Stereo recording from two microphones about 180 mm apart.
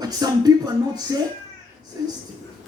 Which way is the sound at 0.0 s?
20° right (ahead or behind).